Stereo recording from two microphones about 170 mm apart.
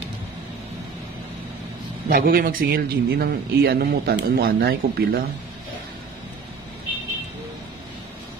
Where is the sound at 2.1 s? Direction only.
60° right (ahead or behind).